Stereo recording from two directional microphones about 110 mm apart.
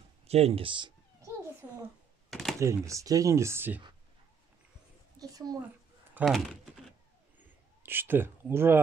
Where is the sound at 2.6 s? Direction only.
30° right (ahead or behind).